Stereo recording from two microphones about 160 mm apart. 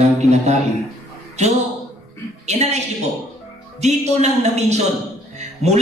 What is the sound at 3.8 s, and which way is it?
A woman's voice, 45° right (ahead or behind).